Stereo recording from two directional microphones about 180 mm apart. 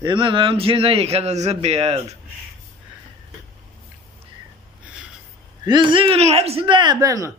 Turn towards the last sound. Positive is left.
turn(degrees=-20)  # may be behind; listen again after turning